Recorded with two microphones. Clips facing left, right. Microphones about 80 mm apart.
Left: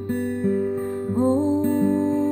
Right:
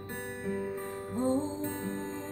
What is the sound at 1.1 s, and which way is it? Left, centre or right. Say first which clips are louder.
Music: left 10 dB; left.